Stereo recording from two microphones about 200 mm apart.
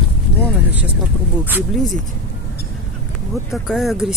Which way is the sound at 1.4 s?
10° right (ahead or behind).